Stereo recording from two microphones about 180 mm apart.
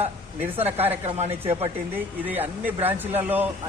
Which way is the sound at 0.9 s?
35° right (ahead or behind).